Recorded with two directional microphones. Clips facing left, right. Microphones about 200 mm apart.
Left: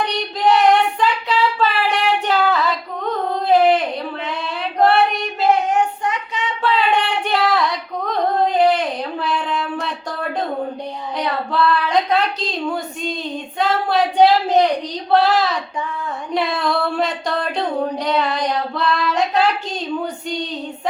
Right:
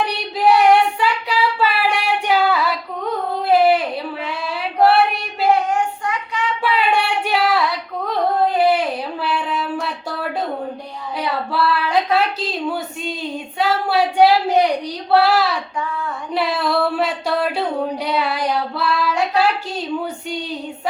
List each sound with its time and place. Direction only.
0.0 s child singing: 10° right (ahead or behind)
1.5 s singing: 10° right (ahead or behind)
5.7 s child singing: 20° left (ahead or behind)
6.6 s female singing: 10° right (ahead or behind)
11.2 s a sound: 5° right (ahead or behind)
17.9 s child singing: 10° right (ahead or behind)